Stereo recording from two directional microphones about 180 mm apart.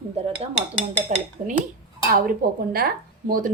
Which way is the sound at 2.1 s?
55° right (ahead or behind).